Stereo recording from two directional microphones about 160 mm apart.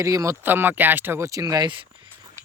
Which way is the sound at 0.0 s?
20° right (ahead or behind).